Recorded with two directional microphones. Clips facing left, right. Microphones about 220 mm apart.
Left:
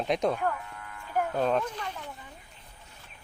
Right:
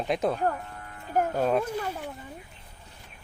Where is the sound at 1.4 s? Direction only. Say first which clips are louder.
Right 1 dB; 10° right (ahead or behind).